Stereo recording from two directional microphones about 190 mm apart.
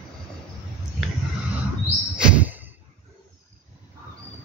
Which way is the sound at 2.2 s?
10° right (ahead or behind).